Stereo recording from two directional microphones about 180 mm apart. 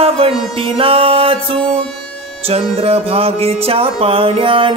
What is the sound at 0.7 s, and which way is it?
Music, 30° right (ahead or behind).